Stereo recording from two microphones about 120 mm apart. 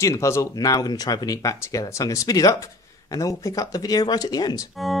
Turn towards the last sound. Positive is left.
turn(degrees=0)  # may be behind; listen again after turning